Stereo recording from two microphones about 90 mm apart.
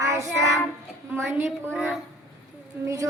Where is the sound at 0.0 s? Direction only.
35° right (ahead or behind).